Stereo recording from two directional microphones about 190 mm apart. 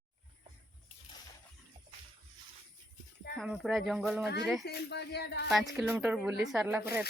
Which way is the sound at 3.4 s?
Centre (ahead or behind).